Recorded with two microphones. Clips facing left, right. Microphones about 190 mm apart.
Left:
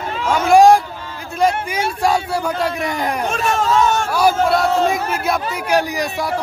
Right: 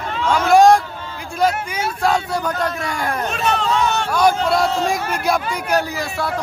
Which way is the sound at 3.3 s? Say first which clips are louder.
Left 2 dB; 45° left (ahead or behind).